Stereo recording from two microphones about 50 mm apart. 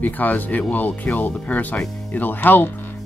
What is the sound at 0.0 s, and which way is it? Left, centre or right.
Speech, left.